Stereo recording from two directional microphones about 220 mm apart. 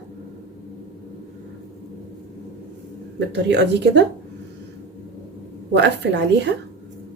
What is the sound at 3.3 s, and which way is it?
Speech, 50° right (ahead or behind).